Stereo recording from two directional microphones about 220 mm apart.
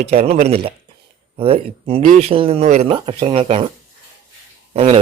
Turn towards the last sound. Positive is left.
turn(degrees=-25)  # may be behind; listen again after turning